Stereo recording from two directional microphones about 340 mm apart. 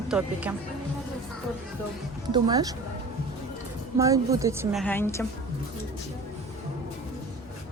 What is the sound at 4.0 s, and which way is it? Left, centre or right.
A woman's voice, centre.